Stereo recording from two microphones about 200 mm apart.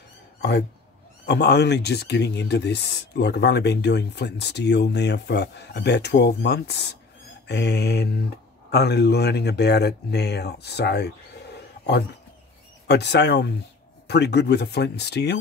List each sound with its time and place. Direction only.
0.4 s speech: 55° left (ahead or behind)
11.5 s a sound: 55° left (ahead or behind)
12.8 s speech: 60° left (ahead or behind)